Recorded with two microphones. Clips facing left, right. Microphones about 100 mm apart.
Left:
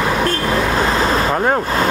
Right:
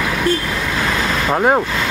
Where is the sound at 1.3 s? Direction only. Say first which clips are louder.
Right 2 dB; 5° right (ahead or behind).